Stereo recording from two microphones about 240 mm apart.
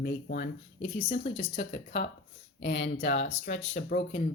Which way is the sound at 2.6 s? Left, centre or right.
Left.